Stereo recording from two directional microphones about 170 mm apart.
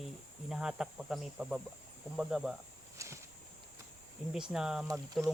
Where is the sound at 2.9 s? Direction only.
15° right (ahead or behind).